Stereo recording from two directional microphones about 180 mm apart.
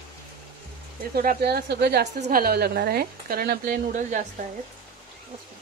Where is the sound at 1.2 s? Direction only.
60° right (ahead or behind).